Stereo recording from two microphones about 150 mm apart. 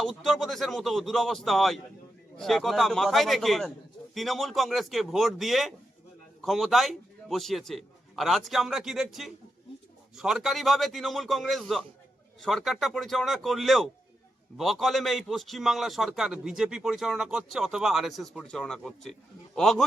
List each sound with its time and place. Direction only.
0.0 s a man's voice: 5° left (ahead or behind)